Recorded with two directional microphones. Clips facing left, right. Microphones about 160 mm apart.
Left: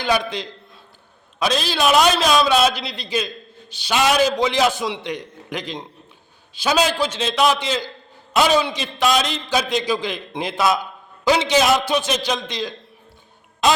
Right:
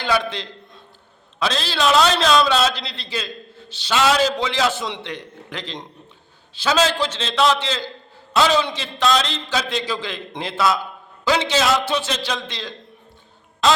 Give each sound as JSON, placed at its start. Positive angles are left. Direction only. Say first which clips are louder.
{"t": 0.0, "sound": "a man's voice", "louder": "left 1 dB", "side_deg": 15}